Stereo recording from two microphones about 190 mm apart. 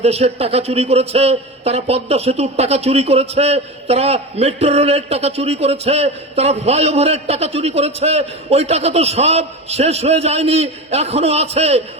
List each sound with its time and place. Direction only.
0.0 s a man's voice: 35° right (ahead or behind)